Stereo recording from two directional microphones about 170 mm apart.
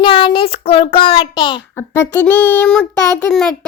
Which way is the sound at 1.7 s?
15° left (ahead or behind).